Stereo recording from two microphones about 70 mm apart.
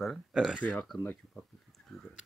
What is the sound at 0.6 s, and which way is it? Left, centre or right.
Speech, left.